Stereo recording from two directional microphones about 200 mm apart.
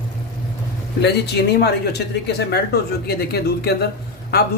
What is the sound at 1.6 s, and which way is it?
Speech, 55° left (ahead or behind).